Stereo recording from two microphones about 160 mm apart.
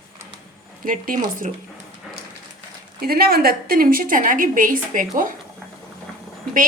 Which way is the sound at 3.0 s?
70° right (ahead or behind).